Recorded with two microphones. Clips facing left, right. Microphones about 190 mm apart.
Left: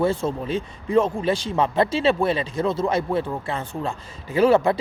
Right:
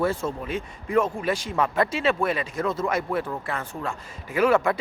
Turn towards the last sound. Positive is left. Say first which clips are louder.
# left 4 dB
turn(degrees=30)  # may be behind; listen again after turning